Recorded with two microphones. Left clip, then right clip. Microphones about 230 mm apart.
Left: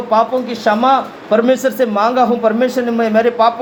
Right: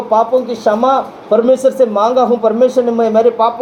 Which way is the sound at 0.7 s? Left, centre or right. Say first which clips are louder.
Even; left.